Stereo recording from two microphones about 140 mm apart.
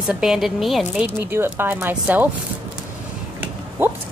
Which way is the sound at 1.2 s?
15° right (ahead or behind).